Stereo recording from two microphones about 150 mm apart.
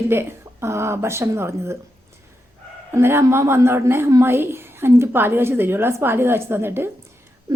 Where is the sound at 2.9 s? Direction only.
15° right (ahead or behind).